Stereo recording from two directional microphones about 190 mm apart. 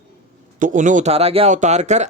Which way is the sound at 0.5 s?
40° right (ahead or behind).